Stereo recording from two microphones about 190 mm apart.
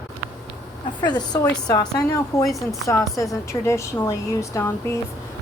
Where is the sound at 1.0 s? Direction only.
20° left (ahead or behind).